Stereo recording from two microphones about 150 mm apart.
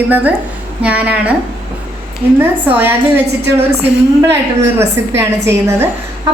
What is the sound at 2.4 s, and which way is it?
Speech, 15° right (ahead or behind).